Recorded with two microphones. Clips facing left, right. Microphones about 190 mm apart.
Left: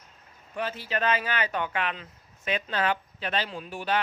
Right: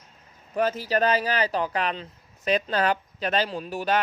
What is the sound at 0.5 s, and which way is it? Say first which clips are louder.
Speech: right 7 dB; 40° right (ahead or behind).